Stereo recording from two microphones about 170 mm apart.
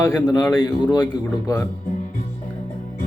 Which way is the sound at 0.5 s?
25° left (ahead or behind).